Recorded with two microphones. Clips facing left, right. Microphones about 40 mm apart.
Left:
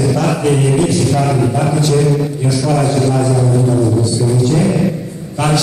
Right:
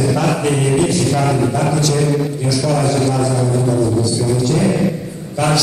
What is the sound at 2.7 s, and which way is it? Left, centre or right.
Speech, left.